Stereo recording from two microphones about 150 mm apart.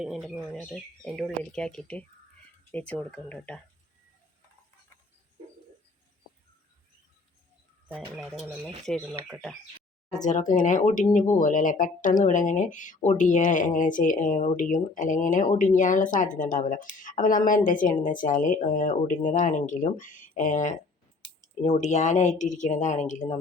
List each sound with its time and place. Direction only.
0.0 s speech: centre (ahead or behind)
8.1 s speech: centre (ahead or behind)
10.1 s a woman's voice: 55° left (ahead or behind)